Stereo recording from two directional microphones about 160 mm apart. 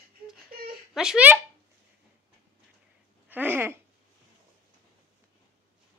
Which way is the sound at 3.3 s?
10° right (ahead or behind).